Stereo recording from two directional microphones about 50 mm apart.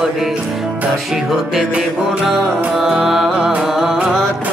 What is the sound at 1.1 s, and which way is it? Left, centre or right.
Music, centre.